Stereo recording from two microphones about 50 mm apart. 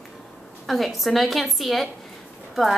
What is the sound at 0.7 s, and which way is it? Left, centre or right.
Speech, centre.